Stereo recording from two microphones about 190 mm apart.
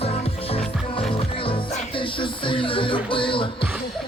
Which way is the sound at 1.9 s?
25° left (ahead or behind).